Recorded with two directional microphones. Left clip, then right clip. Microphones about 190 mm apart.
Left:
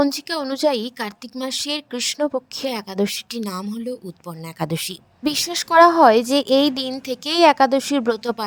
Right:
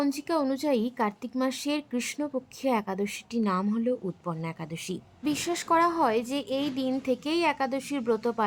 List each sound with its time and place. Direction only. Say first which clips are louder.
0.0 s a woman's voice: left 6 dB; 45° left (ahead or behind)
3.4 s speech: right 1 dB; 5° right (ahead or behind)
4.6 s a woman's voice: left 11 dB; 55° left (ahead or behind)